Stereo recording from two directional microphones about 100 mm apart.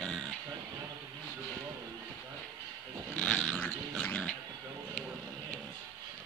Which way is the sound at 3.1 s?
10° left (ahead or behind).